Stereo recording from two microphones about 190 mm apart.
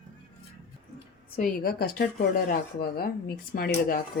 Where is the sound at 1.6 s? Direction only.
50° left (ahead or behind).